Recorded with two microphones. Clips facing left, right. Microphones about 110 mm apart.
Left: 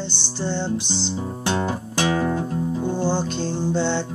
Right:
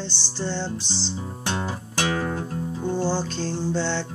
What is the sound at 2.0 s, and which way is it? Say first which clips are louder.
Music: left 4 dB; 15° left (ahead or behind).